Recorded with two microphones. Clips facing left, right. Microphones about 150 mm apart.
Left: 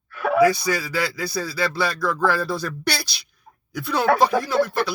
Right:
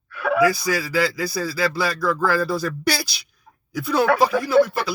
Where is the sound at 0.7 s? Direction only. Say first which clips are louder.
Right 3 dB; 5° right (ahead or behind).